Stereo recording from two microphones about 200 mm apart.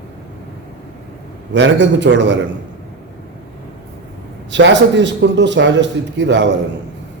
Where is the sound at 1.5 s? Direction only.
65° right (ahead or behind).